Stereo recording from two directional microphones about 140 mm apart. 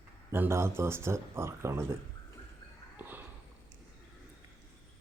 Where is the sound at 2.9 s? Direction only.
15° right (ahead or behind).